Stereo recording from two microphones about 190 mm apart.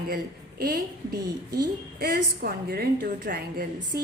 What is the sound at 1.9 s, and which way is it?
A woman's voice, 55° right (ahead or behind).